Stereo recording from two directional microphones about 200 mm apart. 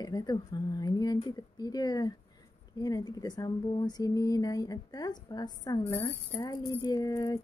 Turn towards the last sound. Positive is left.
turn(degrees=20)  # may be behind; listen again after turning